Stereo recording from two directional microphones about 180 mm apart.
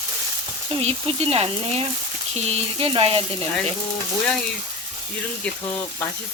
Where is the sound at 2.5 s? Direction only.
30° right (ahead or behind).